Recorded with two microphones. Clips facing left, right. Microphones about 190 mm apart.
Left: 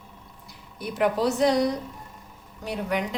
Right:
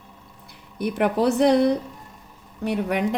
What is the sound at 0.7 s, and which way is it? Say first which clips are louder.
A woman's voice: right 3 dB; 60° right (ahead or behind).